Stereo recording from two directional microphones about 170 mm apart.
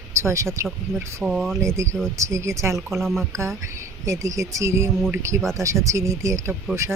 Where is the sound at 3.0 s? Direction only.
Centre (ahead or behind).